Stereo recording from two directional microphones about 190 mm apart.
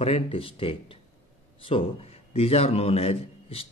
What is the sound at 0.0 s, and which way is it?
A man's voice, 30° left (ahead or behind).